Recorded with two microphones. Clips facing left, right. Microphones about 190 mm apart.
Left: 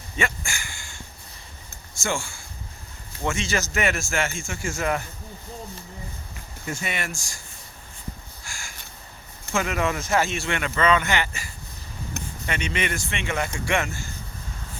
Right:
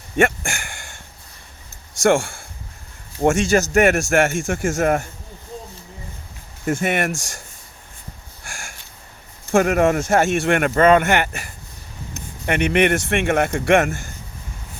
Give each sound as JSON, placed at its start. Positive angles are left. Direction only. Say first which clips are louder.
{"t": 0.2, "sound": "speech", "louder": "right 10 dB", "side_deg": -55}
{"t": 2.0, "sound": "speech", "louder": "right 12 dB", "side_deg": -55}
{"t": 6.7, "sound": "speech", "louder": "right 10 dB", "side_deg": -55}
{"t": 9.5, "sound": "speech", "louder": "right 9 dB", "side_deg": -50}